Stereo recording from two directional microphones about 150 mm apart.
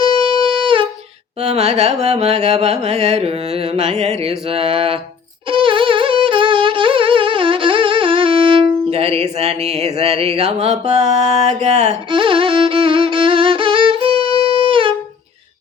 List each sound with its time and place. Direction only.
0.0 s wind instrument: 35° right (ahead or behind)
1.4 s carnatic music: 45° right (ahead or behind)
5.5 s music: 35° right (ahead or behind)
12.1 s music: 35° right (ahead or behind)